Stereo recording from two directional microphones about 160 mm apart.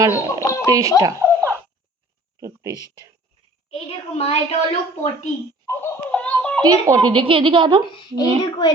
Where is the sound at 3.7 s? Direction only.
40° left (ahead or behind).